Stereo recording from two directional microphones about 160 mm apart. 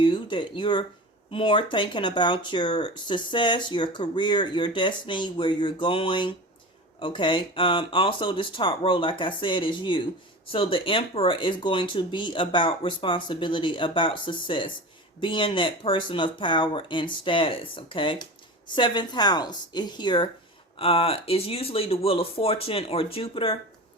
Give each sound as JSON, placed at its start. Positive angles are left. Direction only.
{"t": 0.0, "sound": "speech", "side_deg": 30}